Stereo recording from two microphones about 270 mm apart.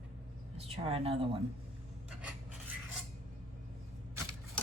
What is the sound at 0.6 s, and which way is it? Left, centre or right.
Speech, right.